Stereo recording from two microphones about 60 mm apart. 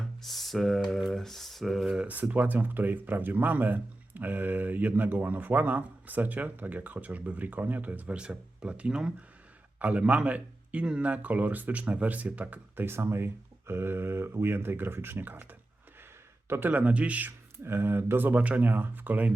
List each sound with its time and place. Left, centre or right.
0.2 s a sound: centre
1.9 s speech: right
8.1 s speech: centre
12.8 s speech: right
17.6 s speech: right